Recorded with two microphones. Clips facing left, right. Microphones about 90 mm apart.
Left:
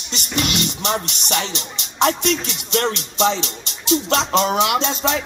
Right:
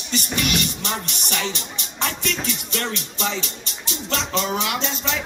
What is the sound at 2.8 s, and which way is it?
Music, 30° left (ahead or behind).